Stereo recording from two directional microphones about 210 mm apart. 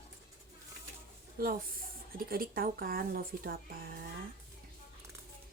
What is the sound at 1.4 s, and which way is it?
A woman's voice, 45° right (ahead or behind).